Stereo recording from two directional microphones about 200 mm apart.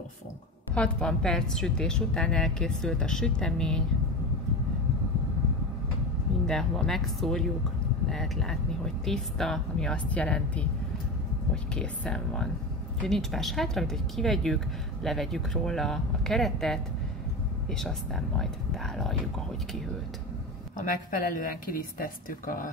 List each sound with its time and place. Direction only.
0.7 s a woman's voice: 5° left (ahead or behind)
6.4 s a woman's voice: 5° left (ahead or behind)
21.3 s speech: 45° left (ahead or behind)